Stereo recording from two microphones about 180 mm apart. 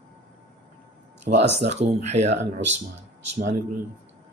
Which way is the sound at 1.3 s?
55° right (ahead or behind).